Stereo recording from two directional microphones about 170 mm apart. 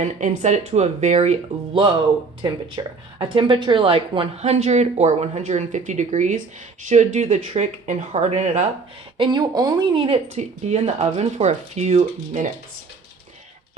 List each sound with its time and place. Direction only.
0.0 s speech: 45° right (ahead or behind)
2.4 s speech: 30° right (ahead or behind)
9.1 s speech: 30° right (ahead or behind)